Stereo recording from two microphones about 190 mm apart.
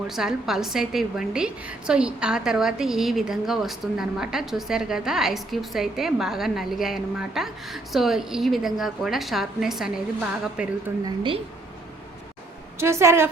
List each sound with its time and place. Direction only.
0.1 s a woman's voice: centre (ahead or behind)
11.0 s a woman's voice: 25° right (ahead or behind)
12.8 s a woman's voice: 15° right (ahead or behind)